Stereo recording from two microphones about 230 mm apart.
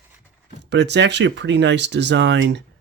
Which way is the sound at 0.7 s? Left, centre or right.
Right.